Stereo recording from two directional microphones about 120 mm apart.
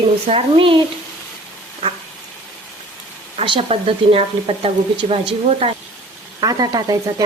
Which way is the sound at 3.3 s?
50° right (ahead or behind).